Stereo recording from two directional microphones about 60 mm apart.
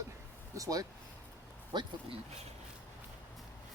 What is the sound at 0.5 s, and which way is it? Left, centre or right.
Speech, right.